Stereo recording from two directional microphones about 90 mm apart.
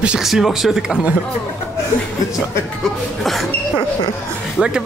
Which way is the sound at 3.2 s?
Centre (ahead or behind).